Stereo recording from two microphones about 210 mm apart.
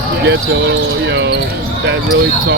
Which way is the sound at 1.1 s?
55° right (ahead or behind).